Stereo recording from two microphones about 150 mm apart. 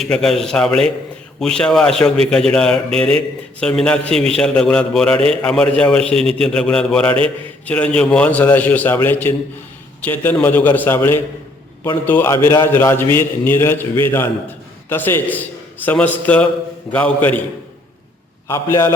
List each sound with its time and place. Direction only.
0.0 s a man's voice: centre (ahead or behind)
18.4 s a man's voice: 20° left (ahead or behind)